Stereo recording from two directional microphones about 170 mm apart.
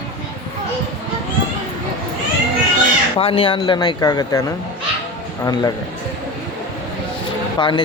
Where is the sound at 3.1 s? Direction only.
30° left (ahead or behind).